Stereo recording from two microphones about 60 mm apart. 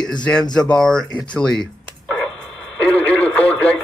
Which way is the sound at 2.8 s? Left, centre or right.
Left.